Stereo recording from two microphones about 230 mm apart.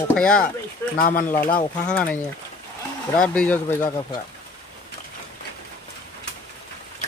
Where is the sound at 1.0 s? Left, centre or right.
Left.